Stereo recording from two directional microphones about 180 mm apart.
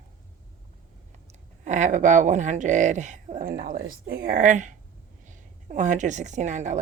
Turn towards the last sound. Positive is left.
turn(degrees=-40)  # may be behind; listen again after turning